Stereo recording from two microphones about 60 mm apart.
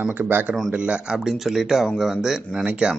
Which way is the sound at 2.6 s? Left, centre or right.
Centre.